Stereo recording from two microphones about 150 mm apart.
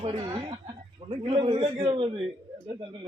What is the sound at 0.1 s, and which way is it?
A man's voice, 30° right (ahead or behind).